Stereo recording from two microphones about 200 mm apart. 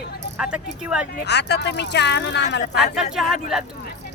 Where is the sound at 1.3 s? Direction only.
55° left (ahead or behind).